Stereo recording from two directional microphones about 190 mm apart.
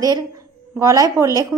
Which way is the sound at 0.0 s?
20° right (ahead or behind).